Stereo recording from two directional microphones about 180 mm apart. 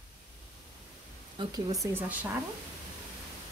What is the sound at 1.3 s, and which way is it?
Speech, 20° right (ahead or behind).